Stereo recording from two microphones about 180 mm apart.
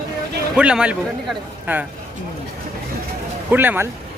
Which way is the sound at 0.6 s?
5° right (ahead or behind).